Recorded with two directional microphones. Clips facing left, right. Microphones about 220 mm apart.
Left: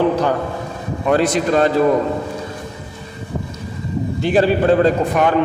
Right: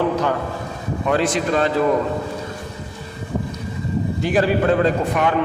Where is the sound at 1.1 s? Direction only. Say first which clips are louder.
Left 4 dB; 40° left (ahead or behind).